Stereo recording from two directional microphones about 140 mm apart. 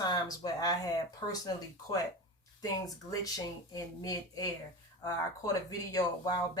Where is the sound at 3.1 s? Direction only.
25° left (ahead or behind).